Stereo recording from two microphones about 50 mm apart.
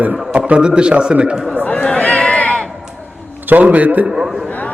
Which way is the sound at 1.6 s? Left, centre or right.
Left.